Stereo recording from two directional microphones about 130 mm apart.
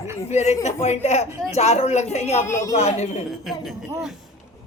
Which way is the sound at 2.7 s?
60° left (ahead or behind).